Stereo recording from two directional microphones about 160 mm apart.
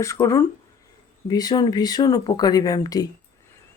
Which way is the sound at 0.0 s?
20° left (ahead or behind).